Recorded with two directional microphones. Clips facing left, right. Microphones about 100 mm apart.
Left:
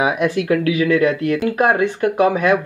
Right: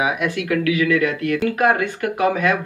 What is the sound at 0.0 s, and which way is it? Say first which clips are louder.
Speech: left 4 dB; 35° left (ahead or behind).